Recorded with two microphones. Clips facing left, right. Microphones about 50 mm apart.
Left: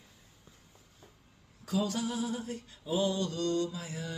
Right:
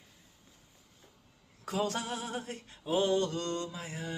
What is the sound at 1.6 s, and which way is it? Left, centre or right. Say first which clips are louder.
Mantra: left 1 dB; right.